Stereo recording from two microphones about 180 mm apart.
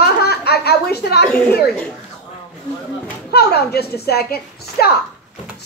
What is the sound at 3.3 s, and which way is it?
A woman's voice, 60° left (ahead or behind).